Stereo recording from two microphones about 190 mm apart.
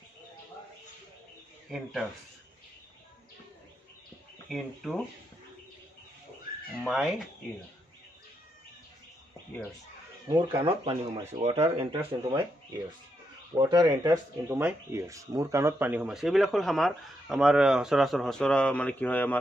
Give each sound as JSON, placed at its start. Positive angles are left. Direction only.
{"t": 1.7, "sound": "speech", "side_deg": 0}
{"t": 4.5, "sound": "speech", "side_deg": 0}
{"t": 6.8, "sound": "speech", "side_deg": 0}
{"t": 10.2, "sound": "speech", "side_deg": -20}
{"t": 12.1, "sound": "speech", "side_deg": -20}